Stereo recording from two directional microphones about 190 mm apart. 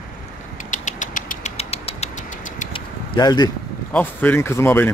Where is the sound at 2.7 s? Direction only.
20° left (ahead or behind).